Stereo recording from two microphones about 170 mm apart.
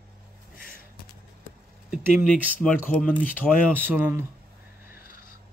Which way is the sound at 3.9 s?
15° right (ahead or behind).